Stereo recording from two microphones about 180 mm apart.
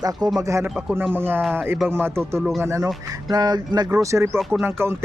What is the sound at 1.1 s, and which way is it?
Speech, 10° right (ahead or behind).